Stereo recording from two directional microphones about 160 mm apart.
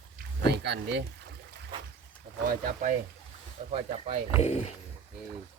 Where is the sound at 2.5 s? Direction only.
55° right (ahead or behind).